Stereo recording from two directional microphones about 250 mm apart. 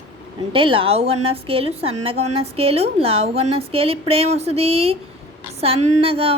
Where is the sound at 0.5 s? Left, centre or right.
Right.